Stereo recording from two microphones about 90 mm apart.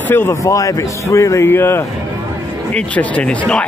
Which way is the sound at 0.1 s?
30° left (ahead or behind).